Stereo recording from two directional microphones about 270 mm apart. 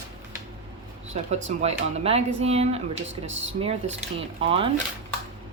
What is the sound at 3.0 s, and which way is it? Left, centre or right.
Speech, right.